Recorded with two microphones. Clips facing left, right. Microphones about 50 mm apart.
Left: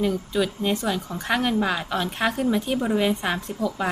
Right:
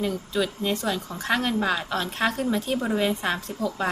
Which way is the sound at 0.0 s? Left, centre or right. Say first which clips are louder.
Left 3 dB; centre.